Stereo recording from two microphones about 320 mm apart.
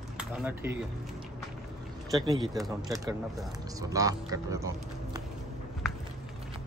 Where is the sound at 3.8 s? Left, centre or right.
Centre.